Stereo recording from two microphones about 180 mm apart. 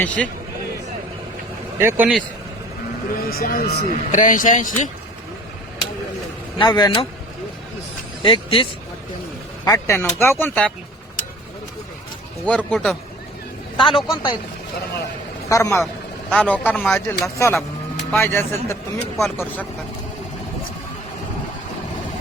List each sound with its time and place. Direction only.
0.0 s a man's voice: 10° left (ahead or behind)
1.8 s a man's voice: 10° right (ahead or behind)
3.2 s speech: 55° left (ahead or behind)
3.8 s speech: 45° left (ahead or behind)
6.6 s speech: 25° left (ahead or behind)
8.2 s speech: 30° left (ahead or behind)
9.6 s a man's voice: 15° left (ahead or behind)
12.5 s a man's voice: 5° left (ahead or behind)
13.7 s a man's voice: 25° left (ahead or behind)
15.4 s a man's voice: 15° left (ahead or behind)
16.3 s a man's voice: 5° left (ahead or behind)